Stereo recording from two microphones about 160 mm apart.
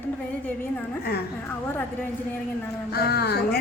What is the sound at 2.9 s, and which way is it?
Speech, 85° left.